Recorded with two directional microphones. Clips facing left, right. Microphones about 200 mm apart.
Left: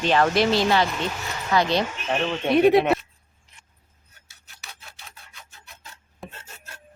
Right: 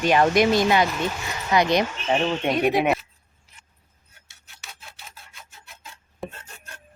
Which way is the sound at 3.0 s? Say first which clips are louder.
Right 1 dB; 5° right (ahead or behind).